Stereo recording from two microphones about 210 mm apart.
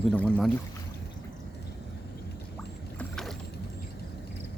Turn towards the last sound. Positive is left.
turn(degrees=0)  # may be behind; listen again after turning